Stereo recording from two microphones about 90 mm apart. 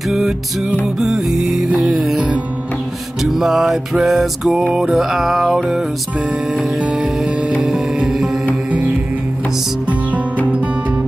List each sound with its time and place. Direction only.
0.1 s music: 5° right (ahead or behind)
3.2 s music: 5° right (ahead or behind)
7.6 s music: centre (ahead or behind)
9.8 s music: 15° right (ahead or behind)